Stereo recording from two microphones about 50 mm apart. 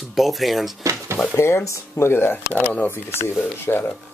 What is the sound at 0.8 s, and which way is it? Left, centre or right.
Speech, right.